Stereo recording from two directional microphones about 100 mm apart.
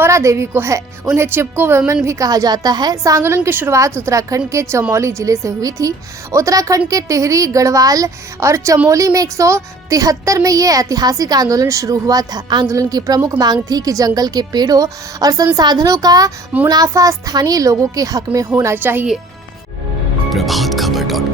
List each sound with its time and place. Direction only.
0.0 s a woman's voice: 30° right (ahead or behind)
2.0 s speech: 35° right (ahead or behind)
18.5 s a woman's voice: 25° right (ahead or behind)
20.3 s music: centre (ahead or behind)